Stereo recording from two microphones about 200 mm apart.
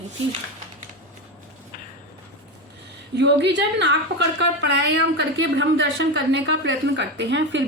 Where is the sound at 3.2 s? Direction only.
60° right (ahead or behind).